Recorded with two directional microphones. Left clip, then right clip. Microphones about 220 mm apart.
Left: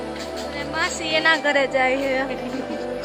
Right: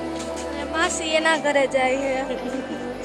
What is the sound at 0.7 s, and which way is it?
A woman's voice, 30° right (ahead or behind).